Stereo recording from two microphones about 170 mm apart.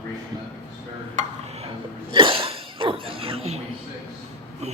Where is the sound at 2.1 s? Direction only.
30° right (ahead or behind).